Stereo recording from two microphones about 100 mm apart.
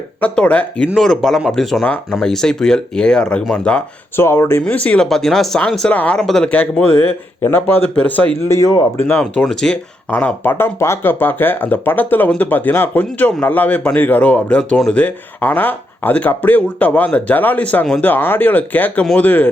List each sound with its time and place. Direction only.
0.2 s speech: 15° left (ahead or behind)
4.2 s speech: 25° left (ahead or behind)
4.6 s speech: 15° left (ahead or behind)
6.5 s speech: 15° left (ahead or behind)
8.4 s speech: 35° left (ahead or behind)
9.0 s speech: 15° left (ahead or behind)
9.4 s speech: 5° left (ahead or behind)
10.1 s speech: 15° left (ahead or behind)
10.5 s speech: 25° left (ahead or behind)